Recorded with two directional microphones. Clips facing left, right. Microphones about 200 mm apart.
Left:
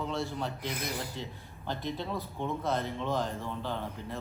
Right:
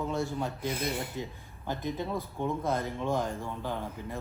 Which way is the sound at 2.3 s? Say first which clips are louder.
Right 1 dB; 10° right (ahead or behind).